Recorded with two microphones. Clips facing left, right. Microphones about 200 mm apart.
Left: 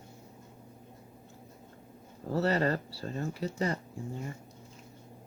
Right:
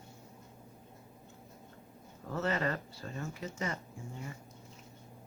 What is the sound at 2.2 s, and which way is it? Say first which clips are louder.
Speech: left 5 dB; 35° left (ahead or behind).